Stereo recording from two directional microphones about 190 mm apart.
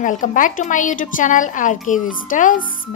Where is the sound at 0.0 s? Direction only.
40° left (ahead or behind).